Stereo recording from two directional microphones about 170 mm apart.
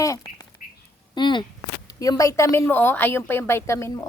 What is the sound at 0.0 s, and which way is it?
Duck, 20° left (ahead or behind).